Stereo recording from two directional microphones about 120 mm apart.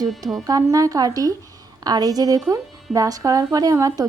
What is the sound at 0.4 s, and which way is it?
Speech, 30° right (ahead or behind).